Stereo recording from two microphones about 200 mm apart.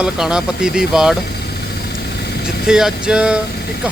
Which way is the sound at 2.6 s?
5° right (ahead or behind).